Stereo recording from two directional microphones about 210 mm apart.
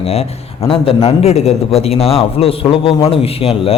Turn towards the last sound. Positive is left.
turn(degrees=25)  # may be behind; listen again after turning